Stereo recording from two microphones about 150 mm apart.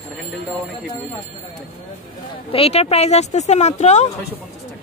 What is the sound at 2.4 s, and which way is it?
Speech, 40° left (ahead or behind).